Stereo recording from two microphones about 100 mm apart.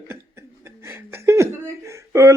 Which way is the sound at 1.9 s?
30° right (ahead or behind).